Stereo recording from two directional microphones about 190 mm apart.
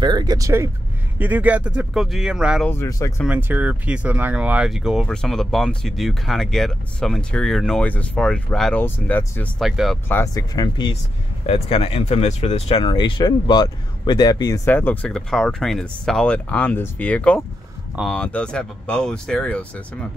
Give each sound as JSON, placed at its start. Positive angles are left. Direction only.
{"t": 0.0, "sound": "speech", "side_deg": -20}
{"t": 2.7, "sound": "speech", "side_deg": 15}
{"t": 3.3, "sound": "speech", "side_deg": -10}
{"t": 10.0, "sound": "speech", "side_deg": 15}